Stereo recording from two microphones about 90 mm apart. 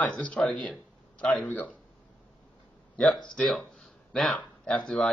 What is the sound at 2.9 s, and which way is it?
Speech, 15° left (ahead or behind).